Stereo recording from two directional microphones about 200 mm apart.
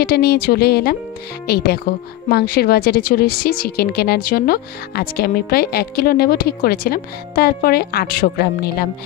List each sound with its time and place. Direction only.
0.0 s a woman's voice: 50° left (ahead or behind)